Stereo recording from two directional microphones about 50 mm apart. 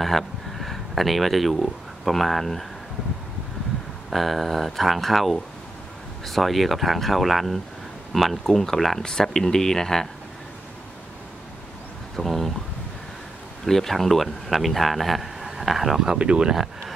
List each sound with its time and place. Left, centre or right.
0.0 s speech: centre
4.1 s speech: centre
12.2 s speech: centre
13.7 s speech: centre
16.2 s speech: centre